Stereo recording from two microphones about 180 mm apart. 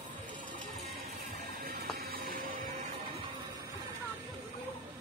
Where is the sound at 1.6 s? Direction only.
55° right (ahead or behind).